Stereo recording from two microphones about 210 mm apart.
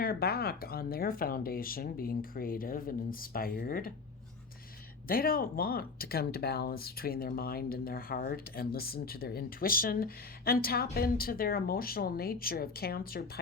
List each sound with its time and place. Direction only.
0.0 s speech: 45° left (ahead or behind)
5.0 s speech: 45° left (ahead or behind)